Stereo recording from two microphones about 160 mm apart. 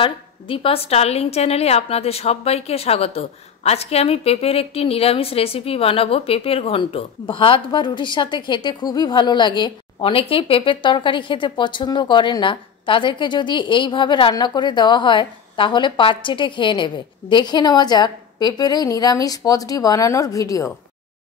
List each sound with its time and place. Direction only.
0.0 s a woman's voice: 35° left (ahead or behind)